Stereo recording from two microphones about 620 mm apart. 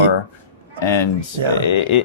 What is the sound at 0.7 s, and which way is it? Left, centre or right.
Speech, left.